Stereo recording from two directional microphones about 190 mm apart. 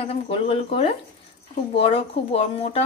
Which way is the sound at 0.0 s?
30° left (ahead or behind).